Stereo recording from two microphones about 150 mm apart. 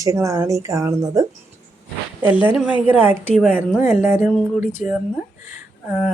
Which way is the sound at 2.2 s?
10° right (ahead or behind).